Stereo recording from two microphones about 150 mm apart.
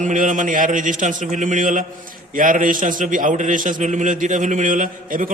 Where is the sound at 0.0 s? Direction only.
60° right (ahead or behind).